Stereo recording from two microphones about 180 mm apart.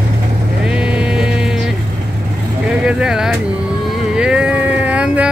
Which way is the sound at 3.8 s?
Centre (ahead or behind).